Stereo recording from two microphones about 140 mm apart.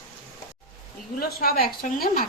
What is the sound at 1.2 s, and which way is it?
A woman's voice, 90° left.